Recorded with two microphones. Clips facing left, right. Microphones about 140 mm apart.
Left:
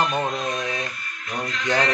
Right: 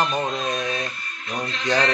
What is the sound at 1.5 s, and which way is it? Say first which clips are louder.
Music: right 1 dB; 30° right (ahead or behind).